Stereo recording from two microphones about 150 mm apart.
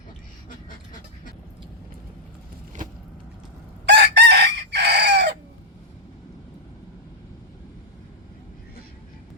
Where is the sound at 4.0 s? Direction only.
90° right.